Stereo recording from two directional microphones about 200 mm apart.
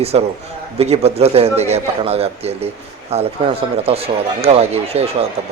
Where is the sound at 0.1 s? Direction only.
30° right (ahead or behind).